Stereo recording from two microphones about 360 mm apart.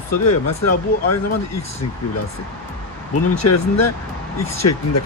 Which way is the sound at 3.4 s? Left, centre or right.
Left.